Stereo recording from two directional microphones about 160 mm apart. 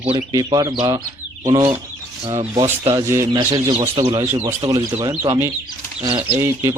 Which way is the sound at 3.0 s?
20° right (ahead or behind).